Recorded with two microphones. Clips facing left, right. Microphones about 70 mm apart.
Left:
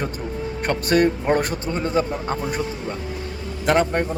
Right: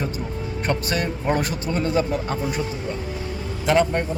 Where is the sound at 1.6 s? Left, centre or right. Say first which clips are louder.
Even; left.